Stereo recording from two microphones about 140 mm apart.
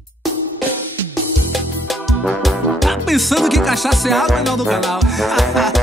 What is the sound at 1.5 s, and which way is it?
Music, centre (ahead or behind).